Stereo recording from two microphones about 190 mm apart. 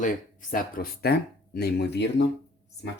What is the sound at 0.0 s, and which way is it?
Speech, 45° left (ahead or behind).